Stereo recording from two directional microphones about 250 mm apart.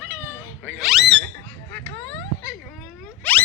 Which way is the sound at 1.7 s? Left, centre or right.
Centre.